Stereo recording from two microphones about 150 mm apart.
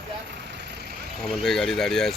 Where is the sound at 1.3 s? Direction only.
Centre (ahead or behind).